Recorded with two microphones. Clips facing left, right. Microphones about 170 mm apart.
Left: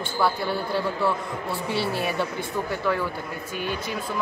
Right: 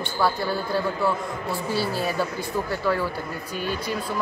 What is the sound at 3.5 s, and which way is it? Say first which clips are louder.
Speech: right 1 dB; 55° left (ahead or behind).